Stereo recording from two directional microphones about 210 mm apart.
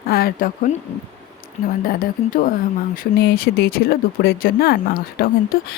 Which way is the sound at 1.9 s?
40° left (ahead or behind).